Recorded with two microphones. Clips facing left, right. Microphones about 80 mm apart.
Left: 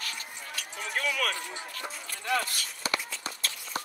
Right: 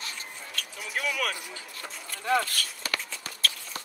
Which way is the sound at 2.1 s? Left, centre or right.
Right.